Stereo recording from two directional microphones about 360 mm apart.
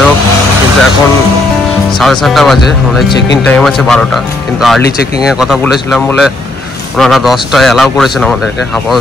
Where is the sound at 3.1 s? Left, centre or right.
Left.